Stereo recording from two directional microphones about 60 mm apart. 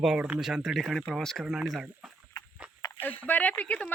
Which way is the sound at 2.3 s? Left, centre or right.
Left.